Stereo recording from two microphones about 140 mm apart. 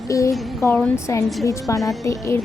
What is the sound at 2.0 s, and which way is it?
Speech, 20° left (ahead or behind).